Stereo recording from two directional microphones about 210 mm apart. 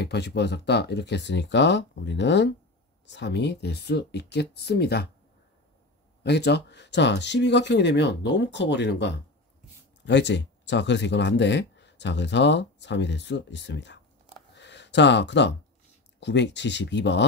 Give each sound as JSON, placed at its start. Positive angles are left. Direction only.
{"t": 0.0, "sound": "speech", "side_deg": 55}
{"t": 6.2, "sound": "speech", "side_deg": 55}
{"t": 14.5, "sound": "a sound", "side_deg": 55}
{"t": 16.2, "sound": "speech", "side_deg": 55}